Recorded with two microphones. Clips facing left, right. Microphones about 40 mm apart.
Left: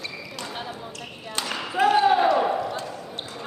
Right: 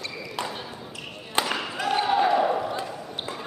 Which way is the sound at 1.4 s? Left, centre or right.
Centre.